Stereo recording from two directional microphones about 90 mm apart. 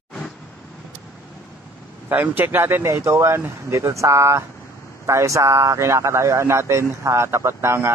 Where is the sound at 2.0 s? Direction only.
20° right (ahead or behind).